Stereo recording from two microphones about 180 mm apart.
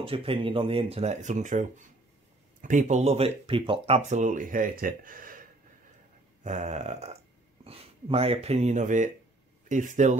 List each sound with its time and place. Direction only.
0.0 s speech: 30° right (ahead or behind)